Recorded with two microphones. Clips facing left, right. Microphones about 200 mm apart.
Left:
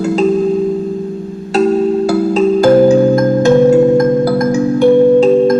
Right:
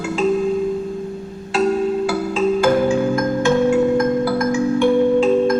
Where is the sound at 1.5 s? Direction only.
40° left (ahead or behind).